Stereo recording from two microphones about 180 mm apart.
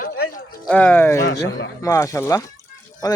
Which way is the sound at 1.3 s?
90° left.